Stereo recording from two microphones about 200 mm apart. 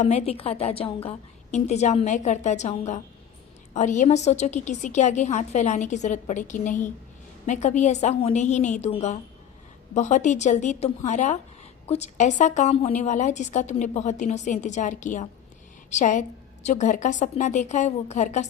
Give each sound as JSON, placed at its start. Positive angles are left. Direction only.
{"t": 0.0, "sound": "a woman's voice", "side_deg": 35}